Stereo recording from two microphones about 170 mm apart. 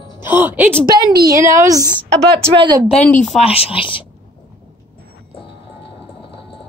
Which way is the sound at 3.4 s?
35° left (ahead or behind).